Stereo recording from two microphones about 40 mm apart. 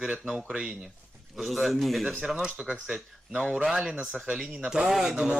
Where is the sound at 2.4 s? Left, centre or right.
Right.